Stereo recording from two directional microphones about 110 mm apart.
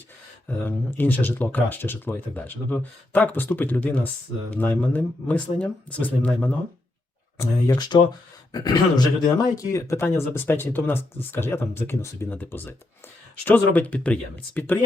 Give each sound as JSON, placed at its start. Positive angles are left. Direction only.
{"t": 0.4, "sound": "speech", "side_deg": 15}
{"t": 7.4, "sound": "speech", "side_deg": 30}
{"t": 7.8, "sound": "speech", "side_deg": 40}
{"t": 9.7, "sound": "speech", "side_deg": 25}